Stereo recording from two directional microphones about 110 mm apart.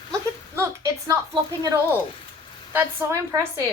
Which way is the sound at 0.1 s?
25° right (ahead or behind).